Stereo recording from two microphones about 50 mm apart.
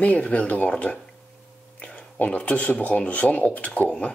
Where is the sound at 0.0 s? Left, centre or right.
Left.